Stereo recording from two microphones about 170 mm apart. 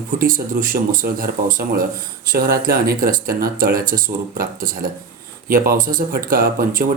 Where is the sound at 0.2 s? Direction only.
60° right (ahead or behind).